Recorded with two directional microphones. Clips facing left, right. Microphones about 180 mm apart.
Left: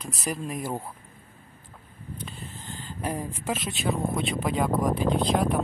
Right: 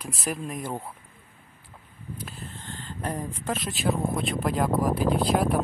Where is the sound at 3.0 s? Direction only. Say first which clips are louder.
Left 1 dB; 5° left (ahead or behind).